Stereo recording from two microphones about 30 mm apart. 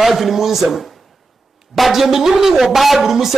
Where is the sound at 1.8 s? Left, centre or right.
Centre.